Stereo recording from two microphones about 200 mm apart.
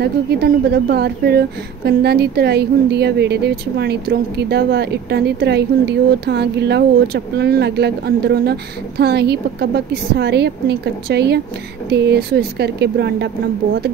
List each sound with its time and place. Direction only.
0.0 s speech: 55° right (ahead or behind)